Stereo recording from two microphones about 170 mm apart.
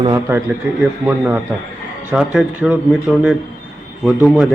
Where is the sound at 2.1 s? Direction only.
5° right (ahead or behind).